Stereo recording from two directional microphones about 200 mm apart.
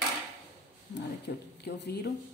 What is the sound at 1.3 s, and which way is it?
Speech, 50° left (ahead or behind).